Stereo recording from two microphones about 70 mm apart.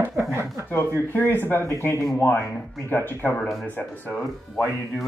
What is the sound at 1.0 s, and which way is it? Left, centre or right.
Speech, left.